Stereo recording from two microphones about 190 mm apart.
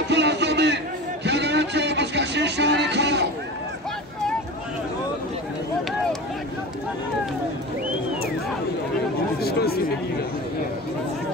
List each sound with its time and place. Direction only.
0.1 s music: 65° right (ahead or behind)
9.4 s chatter: 55° left (ahead or behind)